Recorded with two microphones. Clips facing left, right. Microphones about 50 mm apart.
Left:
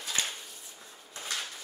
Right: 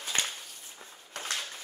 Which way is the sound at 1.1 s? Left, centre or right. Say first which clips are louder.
Right 3 dB; right.